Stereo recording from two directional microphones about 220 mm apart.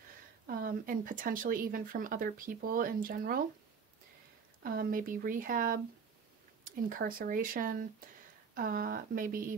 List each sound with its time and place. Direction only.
0.5 s speech: 40° right (ahead or behind)
4.6 s speech: 40° right (ahead or behind)